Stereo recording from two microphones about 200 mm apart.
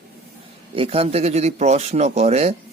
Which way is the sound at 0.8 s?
30° right (ahead or behind).